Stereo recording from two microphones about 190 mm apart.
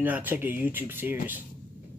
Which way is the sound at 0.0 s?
10° right (ahead or behind).